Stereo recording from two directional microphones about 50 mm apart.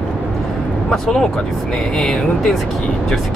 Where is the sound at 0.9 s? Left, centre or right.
Centre.